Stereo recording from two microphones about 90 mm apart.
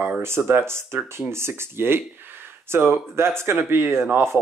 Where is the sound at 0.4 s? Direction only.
30° right (ahead or behind).